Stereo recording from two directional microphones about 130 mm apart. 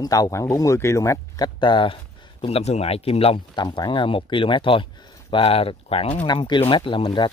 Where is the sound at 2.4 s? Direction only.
55° left (ahead or behind).